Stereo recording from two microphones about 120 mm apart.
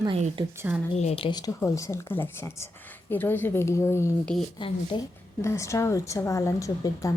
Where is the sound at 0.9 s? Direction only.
65° left (ahead or behind).